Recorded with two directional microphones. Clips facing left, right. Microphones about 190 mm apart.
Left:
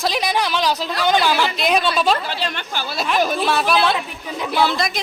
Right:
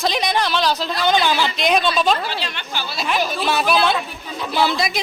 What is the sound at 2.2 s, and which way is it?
Speech, 50° left (ahead or behind).